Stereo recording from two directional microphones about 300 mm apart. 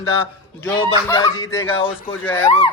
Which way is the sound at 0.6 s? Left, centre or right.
Centre.